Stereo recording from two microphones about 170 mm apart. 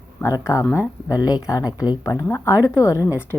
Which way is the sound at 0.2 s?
20° left (ahead or behind).